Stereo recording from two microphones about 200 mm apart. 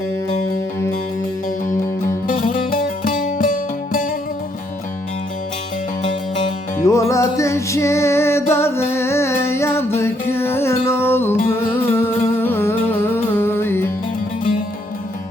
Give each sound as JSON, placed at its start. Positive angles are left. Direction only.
{"t": 2.2, "sound": "music", "side_deg": 40}
{"t": 6.8, "sound": "music", "side_deg": 15}